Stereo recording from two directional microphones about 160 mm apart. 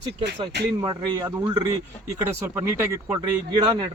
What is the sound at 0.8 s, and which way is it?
Speech, 30° right (ahead or behind).